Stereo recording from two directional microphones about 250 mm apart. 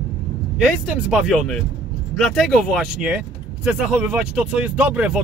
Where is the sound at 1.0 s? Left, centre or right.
Centre.